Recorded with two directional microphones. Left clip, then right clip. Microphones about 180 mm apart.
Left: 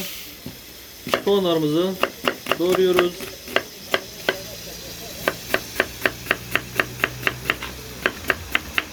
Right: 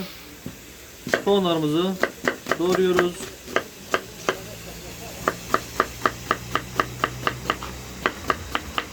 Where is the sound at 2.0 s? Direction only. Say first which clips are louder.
Left 2 dB; 10° right (ahead or behind).